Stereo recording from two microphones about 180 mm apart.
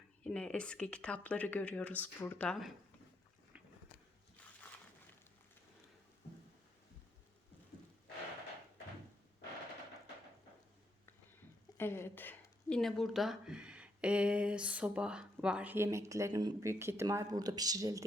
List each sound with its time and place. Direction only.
0.3 s speech: 5° left (ahead or behind)
11.8 s speech: 15° left (ahead or behind); by 18.0 s 20° right (ahead or behind)